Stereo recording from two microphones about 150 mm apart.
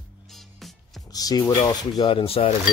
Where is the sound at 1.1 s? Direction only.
25° left (ahead or behind).